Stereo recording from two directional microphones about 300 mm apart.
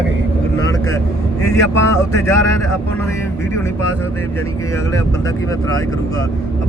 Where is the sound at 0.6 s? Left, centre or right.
Centre.